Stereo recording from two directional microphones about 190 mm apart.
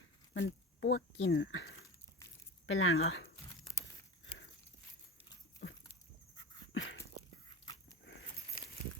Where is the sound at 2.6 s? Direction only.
90° left.